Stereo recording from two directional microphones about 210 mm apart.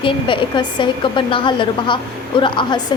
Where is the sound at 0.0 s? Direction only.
25° left (ahead or behind).